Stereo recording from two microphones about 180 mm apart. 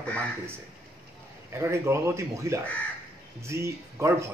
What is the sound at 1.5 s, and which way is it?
Speech, 15° right (ahead or behind).